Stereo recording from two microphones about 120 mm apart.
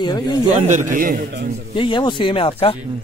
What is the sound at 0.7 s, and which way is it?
Speech, 90° right.